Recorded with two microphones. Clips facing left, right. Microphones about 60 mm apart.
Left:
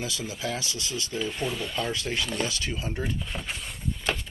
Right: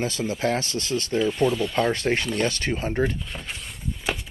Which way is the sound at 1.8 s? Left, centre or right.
Right.